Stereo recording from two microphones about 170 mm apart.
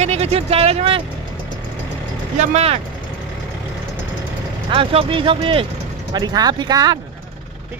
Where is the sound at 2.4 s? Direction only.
40° right (ahead or behind).